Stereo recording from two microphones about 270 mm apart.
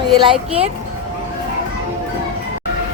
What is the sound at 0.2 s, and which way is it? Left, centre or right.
Speech, centre.